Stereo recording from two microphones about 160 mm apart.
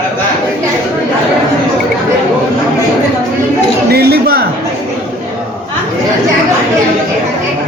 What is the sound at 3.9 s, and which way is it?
Speech, 75° right (ahead or behind).